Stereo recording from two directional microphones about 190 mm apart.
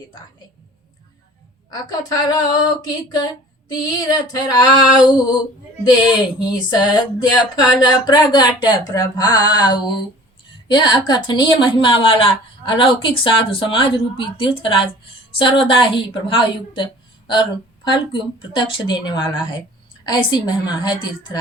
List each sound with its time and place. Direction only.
1.7 s a woman's voice: 20° left (ahead or behind)